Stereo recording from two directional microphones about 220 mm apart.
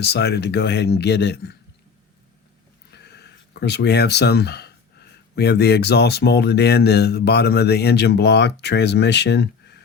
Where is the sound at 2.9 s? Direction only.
50° left (ahead or behind).